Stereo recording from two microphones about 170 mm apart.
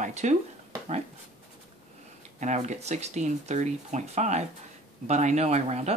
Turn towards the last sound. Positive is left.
turn(degrees=-40)  # may be behind; listen again after turning